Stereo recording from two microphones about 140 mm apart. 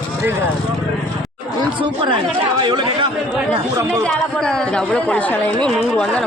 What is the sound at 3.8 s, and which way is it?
Speech, 20° right (ahead or behind).